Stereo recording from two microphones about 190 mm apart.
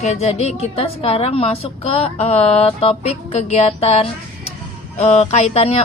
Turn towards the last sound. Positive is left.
turn(degrees=35)  # may be behind; listen again after turning